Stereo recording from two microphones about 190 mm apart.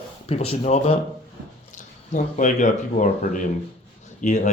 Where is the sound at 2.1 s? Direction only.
40° left (ahead or behind).